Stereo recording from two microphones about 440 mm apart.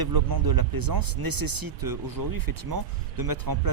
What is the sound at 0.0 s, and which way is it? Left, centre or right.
Speech, right.